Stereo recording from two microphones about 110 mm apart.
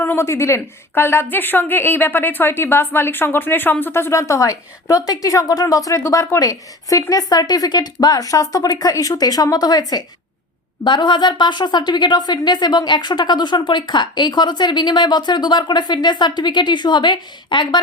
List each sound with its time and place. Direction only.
0.0 s a woman's voice: 20° left (ahead or behind); by 17.7 s 45° left (ahead or behind)